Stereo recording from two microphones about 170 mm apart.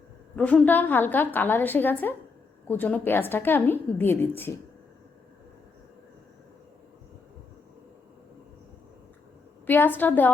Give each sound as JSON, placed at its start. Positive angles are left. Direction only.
{"t": 0.3, "sound": "a woman's voice", "side_deg": 10}
{"t": 9.6, "sound": "a woman's voice", "side_deg": 10}